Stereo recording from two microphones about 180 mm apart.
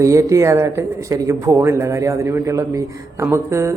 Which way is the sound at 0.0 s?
15° right (ahead or behind).